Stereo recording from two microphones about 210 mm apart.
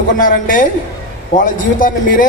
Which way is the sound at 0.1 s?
40° left (ahead or behind).